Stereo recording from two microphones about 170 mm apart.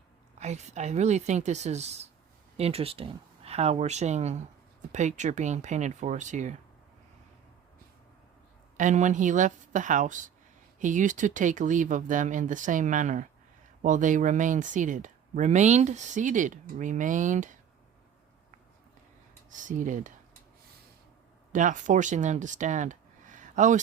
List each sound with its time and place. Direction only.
0.3 s speech: 40° right (ahead or behind)
8.8 s speech: 45° right (ahead or behind)
19.5 s speech: 50° right (ahead or behind)
21.5 s speech: 50° right (ahead or behind)